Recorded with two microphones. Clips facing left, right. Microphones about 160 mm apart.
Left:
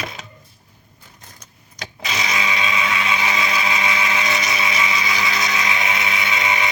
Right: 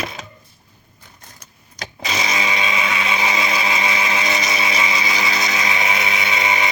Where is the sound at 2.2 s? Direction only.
30° right (ahead or behind).